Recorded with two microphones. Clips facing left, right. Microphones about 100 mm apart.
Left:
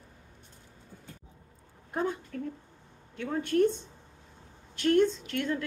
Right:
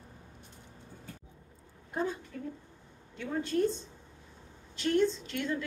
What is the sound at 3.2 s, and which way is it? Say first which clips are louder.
A woman's voice: left 4 dB; 60° left (ahead or behind).